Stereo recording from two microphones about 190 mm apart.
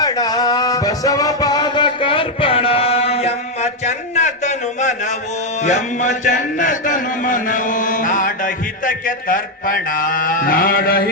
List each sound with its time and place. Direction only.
0.0 s music: 20° left (ahead or behind); by 5.1 s 40° left (ahead or behind)
5.6 s speech: 40° left (ahead or behind)